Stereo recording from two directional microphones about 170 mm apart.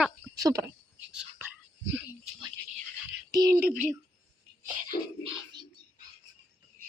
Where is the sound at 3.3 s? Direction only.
20° right (ahead or behind).